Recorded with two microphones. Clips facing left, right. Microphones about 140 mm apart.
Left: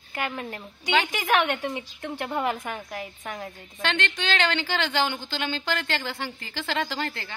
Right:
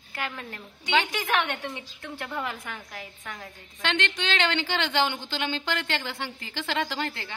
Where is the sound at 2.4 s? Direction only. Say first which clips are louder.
Left 7 dB; 50° left (ahead or behind).